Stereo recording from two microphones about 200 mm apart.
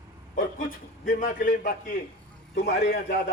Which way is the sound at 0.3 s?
45° left (ahead or behind).